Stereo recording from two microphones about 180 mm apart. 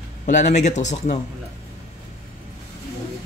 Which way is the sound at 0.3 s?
40° left (ahead or behind).